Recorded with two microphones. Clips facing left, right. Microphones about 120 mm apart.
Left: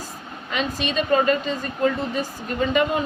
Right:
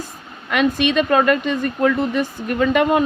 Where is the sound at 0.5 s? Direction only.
60° right (ahead or behind).